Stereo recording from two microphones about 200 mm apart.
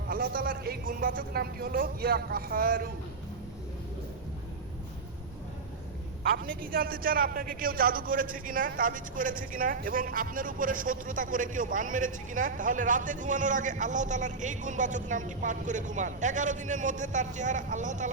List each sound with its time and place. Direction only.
0.1 s speech: 45° right (ahead or behind)
6.3 s a man's voice: 45° right (ahead or behind)